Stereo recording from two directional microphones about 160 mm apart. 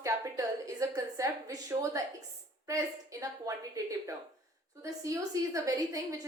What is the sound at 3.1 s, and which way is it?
Speech, 20° right (ahead or behind).